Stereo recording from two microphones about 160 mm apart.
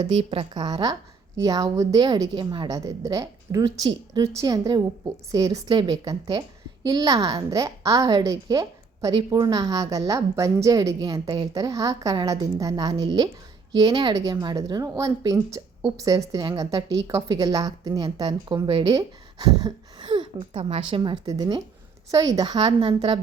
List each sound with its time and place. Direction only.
0.0 s a woman's voice: 30° right (ahead or behind)